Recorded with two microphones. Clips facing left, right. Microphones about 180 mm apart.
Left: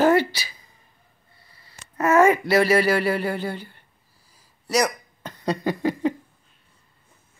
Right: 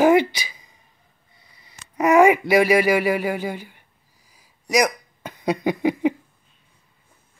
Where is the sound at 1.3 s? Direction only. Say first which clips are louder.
Even; 15° right (ahead or behind).